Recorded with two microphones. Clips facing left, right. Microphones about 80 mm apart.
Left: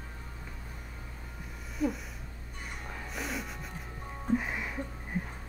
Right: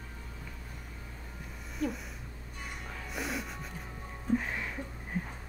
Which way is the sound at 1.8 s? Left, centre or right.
Centre.